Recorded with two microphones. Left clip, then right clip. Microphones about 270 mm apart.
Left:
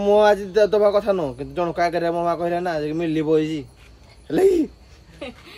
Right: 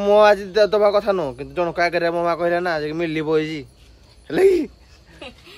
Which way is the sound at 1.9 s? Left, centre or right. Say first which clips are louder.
Right 2 dB; right.